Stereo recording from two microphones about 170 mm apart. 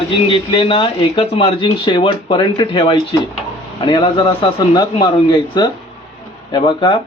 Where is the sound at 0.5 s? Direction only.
30° left (ahead or behind).